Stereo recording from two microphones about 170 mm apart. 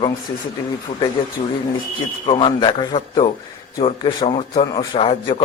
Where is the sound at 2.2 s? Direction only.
30° left (ahead or behind).